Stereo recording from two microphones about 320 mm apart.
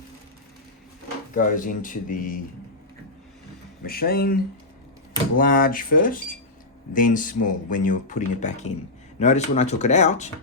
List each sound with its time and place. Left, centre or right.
1.4 s speech: left
3.8 s speech: left
5.4 s speech: left